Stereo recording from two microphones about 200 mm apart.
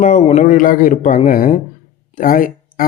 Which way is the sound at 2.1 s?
45° left (ahead or behind).